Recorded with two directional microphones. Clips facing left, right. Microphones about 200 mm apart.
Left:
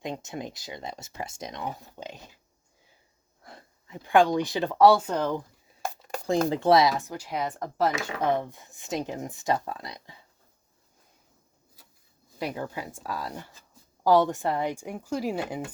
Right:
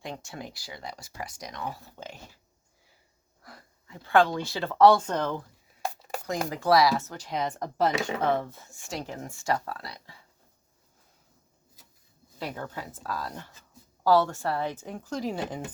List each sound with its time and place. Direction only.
0.0 s speech: 20° left (ahead or behind)
3.4 s speech: 20° left (ahead or behind)
6.5 s speech: 25° left (ahead or behind); by 7.9 s centre (ahead or behind)
8.2 s speech: 15° left (ahead or behind)
12.5 s speech: 10° left (ahead or behind)